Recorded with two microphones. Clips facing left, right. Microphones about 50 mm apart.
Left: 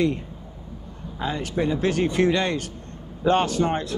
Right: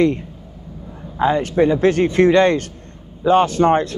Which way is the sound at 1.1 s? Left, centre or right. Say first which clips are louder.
Right 10 dB; right.